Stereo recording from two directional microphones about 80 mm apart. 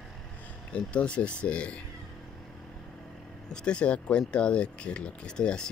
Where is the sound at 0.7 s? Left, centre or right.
Centre.